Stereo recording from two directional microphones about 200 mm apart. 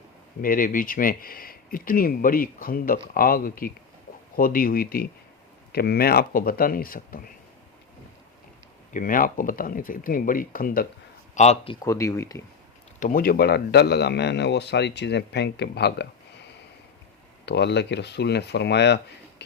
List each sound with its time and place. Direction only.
0.4 s speech: 45° left (ahead or behind)
8.9 s speech: 40° left (ahead or behind)
11.3 s speech: 30° left (ahead or behind)
11.9 s speech: 15° left (ahead or behind)
13.0 s speech: 40° left (ahead or behind); by 16.0 s 55° left (ahead or behind)
17.4 s speech: 55° left (ahead or behind)
19.4 s a sound: 60° left (ahead or behind)